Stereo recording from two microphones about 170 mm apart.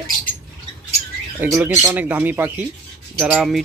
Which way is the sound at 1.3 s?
10° right (ahead or behind).